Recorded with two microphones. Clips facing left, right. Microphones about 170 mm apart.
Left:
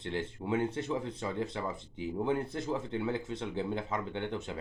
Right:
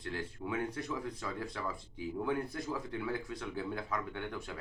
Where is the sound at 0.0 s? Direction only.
25° left (ahead or behind).